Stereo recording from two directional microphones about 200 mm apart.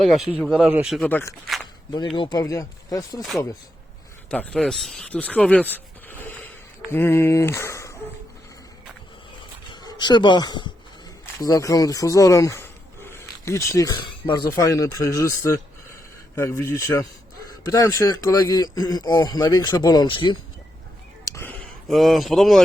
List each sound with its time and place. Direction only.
0.0 s speech: centre (ahead or behind)
2.1 s speech: 20° left (ahead or behind)
4.3 s speech: 5° left (ahead or behind)
9.6 s a man's voice: 20° left (ahead or behind)
21.2 s a sound: 15° left (ahead or behind)
21.8 s speech: centre (ahead or behind)